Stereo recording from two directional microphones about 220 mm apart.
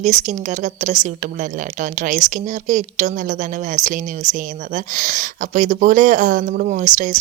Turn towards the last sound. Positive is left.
turn(degrees=-35)  # may be behind; listen again after turning